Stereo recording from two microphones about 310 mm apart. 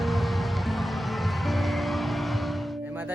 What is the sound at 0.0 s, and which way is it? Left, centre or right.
Music, centre.